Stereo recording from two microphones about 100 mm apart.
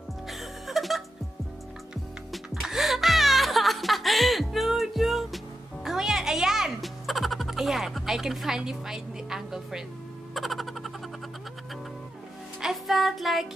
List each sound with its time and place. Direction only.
0.3 s music: centre (ahead or behind)
2.3 s music: centre (ahead or behind)
12.5 s music: 5° right (ahead or behind)